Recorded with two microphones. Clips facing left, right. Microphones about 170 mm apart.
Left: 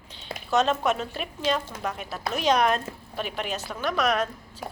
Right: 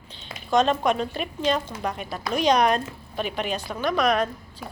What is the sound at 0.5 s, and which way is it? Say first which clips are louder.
A woman's voice: right 2 dB; 5° left (ahead or behind).